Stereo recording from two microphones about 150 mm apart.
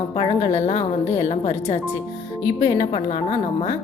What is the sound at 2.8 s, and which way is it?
Speech, 40° left (ahead or behind).